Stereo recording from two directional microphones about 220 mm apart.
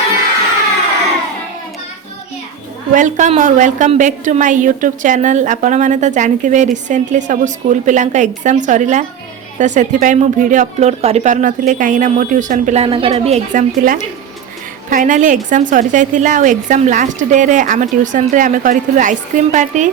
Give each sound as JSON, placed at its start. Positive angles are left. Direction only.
{"t": 2.9, "sound": "a woman's voice", "side_deg": -35}